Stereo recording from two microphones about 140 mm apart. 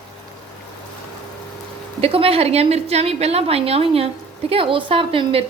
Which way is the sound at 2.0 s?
45° right (ahead or behind).